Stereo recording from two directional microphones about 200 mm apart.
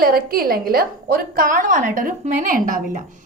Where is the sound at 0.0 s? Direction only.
50° right (ahead or behind).